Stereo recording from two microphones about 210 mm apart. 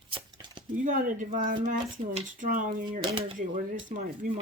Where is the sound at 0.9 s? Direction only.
40° right (ahead or behind).